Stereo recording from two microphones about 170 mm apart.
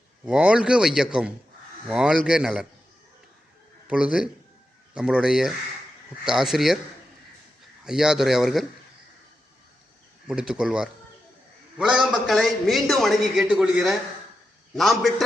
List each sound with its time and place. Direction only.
0.3 s a man's voice: 5° right (ahead or behind)
3.8 s a man's voice: 5° right (ahead or behind)
7.9 s a man's voice: 5° right (ahead or behind)
10.2 s a man's voice: 5° right (ahead or behind)